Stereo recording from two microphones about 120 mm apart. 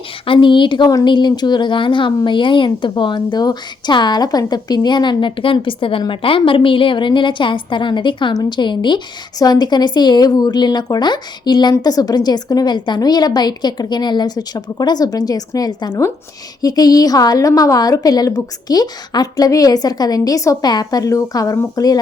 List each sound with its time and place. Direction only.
0.3 s a woman's voice: 40° left (ahead or behind)